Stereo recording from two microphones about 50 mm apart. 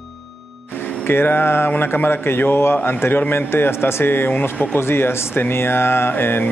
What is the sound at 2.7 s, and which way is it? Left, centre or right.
Speech, left.